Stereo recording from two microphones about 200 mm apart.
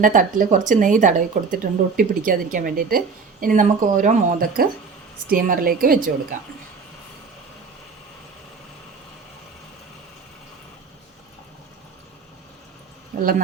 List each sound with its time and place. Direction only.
0.0 s speech: 40° right (ahead or behind)
13.1 s speech: 40° right (ahead or behind)